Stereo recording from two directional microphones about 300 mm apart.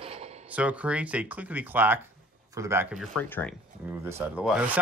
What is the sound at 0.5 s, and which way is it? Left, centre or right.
Speech, centre.